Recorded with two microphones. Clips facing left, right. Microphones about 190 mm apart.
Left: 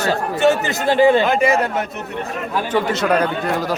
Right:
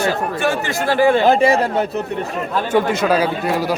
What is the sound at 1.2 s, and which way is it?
Speech, 30° right (ahead or behind).